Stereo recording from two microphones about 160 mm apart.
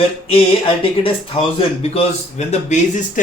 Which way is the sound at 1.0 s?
35° left (ahead or behind).